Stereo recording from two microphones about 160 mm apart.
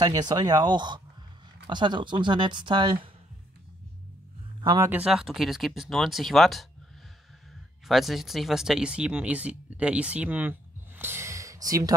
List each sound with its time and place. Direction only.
0.0 s speech: 25° right (ahead or behind)
4.6 s speech: 30° right (ahead or behind)
4.8 s speech: 10° right (ahead or behind)
7.8 s speech: centre (ahead or behind)
11.0 s a sound: 15° right (ahead or behind)